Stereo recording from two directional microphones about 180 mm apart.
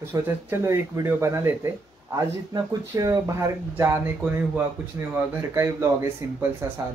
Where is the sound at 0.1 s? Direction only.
15° right (ahead or behind).